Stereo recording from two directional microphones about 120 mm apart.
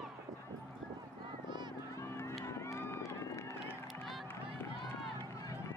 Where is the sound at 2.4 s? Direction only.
25° left (ahead or behind).